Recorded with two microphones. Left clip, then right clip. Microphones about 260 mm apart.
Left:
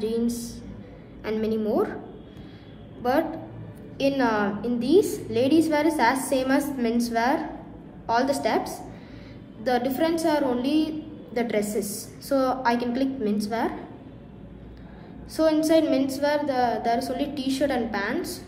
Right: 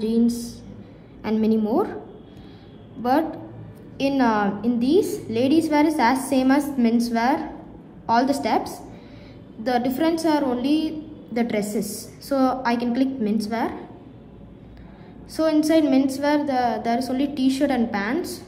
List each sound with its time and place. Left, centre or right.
1.2 s a sound: centre
4.0 s a woman's voice: centre
15.3 s a woman's voice: right